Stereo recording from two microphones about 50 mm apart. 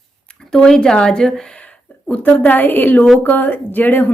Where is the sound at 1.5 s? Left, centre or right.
Left.